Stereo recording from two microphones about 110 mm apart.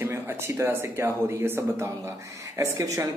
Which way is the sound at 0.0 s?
20° right (ahead or behind).